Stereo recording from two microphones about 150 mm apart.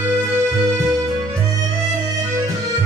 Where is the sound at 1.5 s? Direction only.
25° right (ahead or behind).